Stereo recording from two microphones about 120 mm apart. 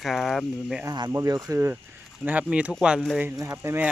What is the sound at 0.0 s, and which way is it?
Speech, centre (ahead or behind).